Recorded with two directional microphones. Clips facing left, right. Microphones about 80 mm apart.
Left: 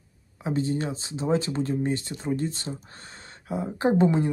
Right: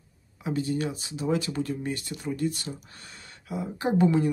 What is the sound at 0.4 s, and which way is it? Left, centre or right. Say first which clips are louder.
Speech: left 1 dB; left.